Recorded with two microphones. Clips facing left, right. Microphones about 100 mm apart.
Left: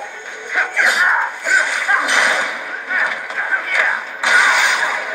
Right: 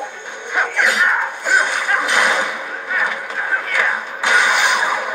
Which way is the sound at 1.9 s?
10° left (ahead or behind).